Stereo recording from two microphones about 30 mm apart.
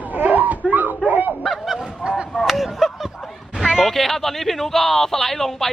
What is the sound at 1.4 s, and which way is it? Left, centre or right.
Honk, centre.